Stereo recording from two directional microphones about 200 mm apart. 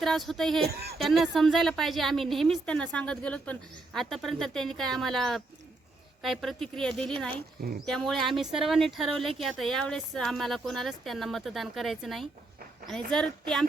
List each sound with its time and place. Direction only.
0.0 s a woman's voice: centre (ahead or behind)
0.7 s speech: 50° right (ahead or behind)
1.0 s a woman's voice: centre (ahead or behind)